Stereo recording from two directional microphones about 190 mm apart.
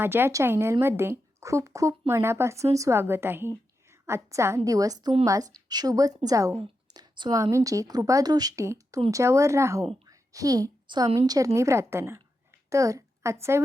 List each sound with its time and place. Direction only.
0.0 s a woman's voice: 10° right (ahead or behind)
6.6 s a sound: 25° right (ahead or behind)
7.5 s a woman's voice: 15° right (ahead or behind)